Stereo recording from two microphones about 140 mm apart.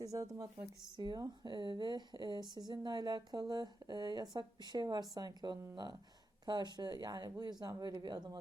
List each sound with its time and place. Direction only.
0.0 s speech: 25° right (ahead or behind)